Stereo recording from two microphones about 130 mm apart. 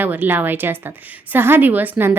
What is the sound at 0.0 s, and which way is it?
A woman's voice, 15° right (ahead or behind).